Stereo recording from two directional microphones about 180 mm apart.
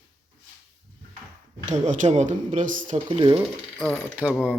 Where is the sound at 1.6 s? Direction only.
40° right (ahead or behind).